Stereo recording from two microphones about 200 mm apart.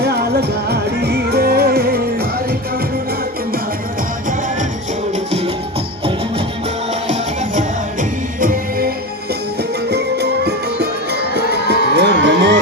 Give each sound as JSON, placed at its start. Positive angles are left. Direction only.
{"t": 0.0, "sound": "music", "side_deg": -55}
{"t": 8.4, "sound": "music", "side_deg": -45}
{"t": 9.9, "sound": "music", "side_deg": -55}